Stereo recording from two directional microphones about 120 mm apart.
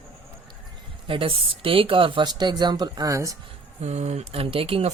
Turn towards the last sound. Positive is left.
turn(degrees=-55)  # may be behind; listen again after turning